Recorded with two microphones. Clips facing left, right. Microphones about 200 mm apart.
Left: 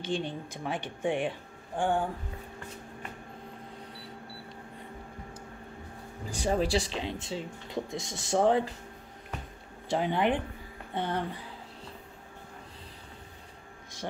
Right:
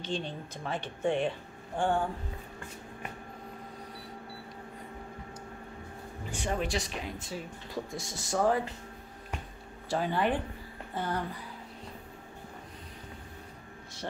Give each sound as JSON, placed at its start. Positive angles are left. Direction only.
{"t": 0.0, "sound": "speech", "side_deg": 15}
{"t": 6.3, "sound": "speech", "side_deg": 35}
{"t": 9.8, "sound": "speech", "side_deg": 20}